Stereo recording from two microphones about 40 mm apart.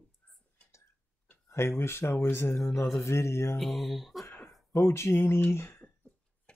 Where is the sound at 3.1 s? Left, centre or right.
Left.